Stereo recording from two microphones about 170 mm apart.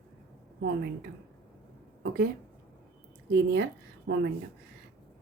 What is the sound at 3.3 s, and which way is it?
Speech, 90° right.